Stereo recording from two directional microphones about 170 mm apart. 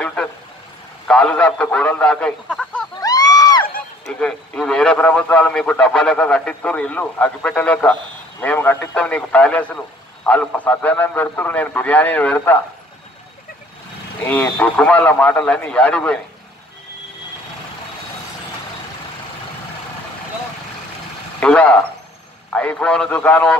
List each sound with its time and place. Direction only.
0.0 s vehicle: 5° left (ahead or behind)
1.0 s speech: 5° left (ahead or behind)
3.0 s a sound: 20° left (ahead or behind)
4.1 s speech: 5° left (ahead or behind)
14.2 s speech: 10° left (ahead or behind)
21.4 s speech: 5° left (ahead or behind)